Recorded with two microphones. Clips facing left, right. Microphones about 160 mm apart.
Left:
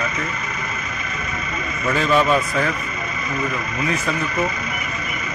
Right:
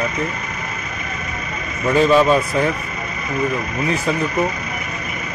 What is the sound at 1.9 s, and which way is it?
Speech, 25° right (ahead or behind).